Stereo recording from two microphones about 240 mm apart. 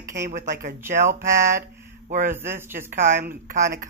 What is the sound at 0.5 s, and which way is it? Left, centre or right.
Speech, right.